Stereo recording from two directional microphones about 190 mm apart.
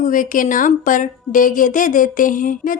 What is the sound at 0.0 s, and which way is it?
A woman's voice, 45° left (ahead or behind).